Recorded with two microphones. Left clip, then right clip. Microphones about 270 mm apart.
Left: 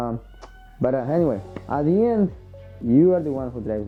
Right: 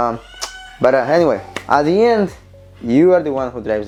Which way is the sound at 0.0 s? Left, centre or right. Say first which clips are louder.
Right 11 dB; centre.